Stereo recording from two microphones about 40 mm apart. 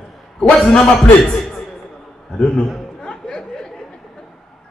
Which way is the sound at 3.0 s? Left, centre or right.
Centre.